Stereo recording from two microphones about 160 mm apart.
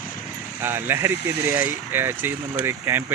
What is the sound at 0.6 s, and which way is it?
Speech, 15° right (ahead or behind).